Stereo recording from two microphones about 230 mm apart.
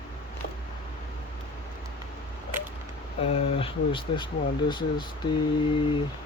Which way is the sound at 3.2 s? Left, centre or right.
Left.